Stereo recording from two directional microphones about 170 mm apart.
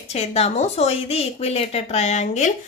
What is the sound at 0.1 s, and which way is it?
Speech, 40° left (ahead or behind).